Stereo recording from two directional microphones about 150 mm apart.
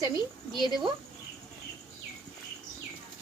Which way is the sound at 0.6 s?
30° right (ahead or behind).